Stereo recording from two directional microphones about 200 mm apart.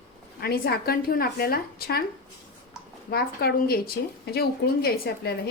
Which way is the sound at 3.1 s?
50° left (ahead or behind).